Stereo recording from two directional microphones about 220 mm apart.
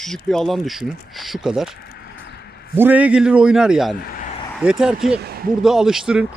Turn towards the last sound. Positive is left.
turn(degrees=-5)  # may be behind; listen again after turning